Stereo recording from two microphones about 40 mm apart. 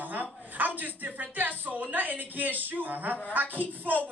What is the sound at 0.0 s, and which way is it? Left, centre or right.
A woman's voice, right.